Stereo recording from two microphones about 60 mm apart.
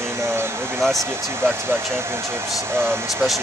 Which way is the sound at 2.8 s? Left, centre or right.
Right.